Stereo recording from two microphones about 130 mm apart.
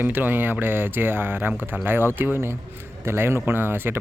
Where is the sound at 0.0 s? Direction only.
15° right (ahead or behind).